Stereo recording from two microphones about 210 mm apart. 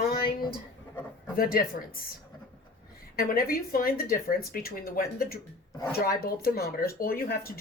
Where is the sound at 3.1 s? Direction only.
45° left (ahead or behind).